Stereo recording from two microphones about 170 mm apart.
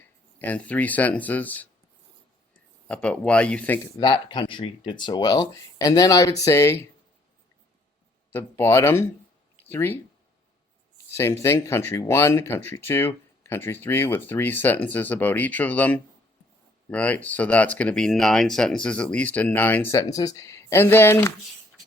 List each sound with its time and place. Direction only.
0.3 s speech: 10° left (ahead or behind)
2.8 s speech: 5° left (ahead or behind)
3.9 s speech: 25° left (ahead or behind)
8.3 s speech: 10° left (ahead or behind)
11.2 s speech: 15° left (ahead or behind)